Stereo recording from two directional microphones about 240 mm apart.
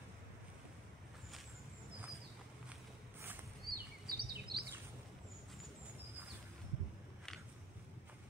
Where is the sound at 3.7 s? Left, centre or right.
Right.